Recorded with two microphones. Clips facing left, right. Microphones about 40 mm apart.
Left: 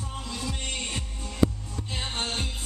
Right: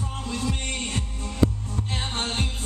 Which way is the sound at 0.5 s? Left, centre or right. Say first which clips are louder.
Right 3 dB; right.